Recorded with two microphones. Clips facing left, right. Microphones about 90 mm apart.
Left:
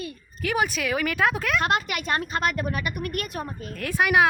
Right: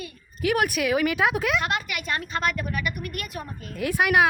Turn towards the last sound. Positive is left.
turn(degrees=-5)  # may be behind; listen again after turning